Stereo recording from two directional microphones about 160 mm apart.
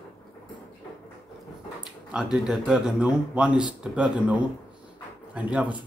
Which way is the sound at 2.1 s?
5° right (ahead or behind).